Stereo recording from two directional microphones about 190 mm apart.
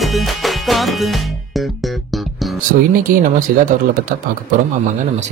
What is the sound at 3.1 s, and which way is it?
Speech, 45° right (ahead or behind).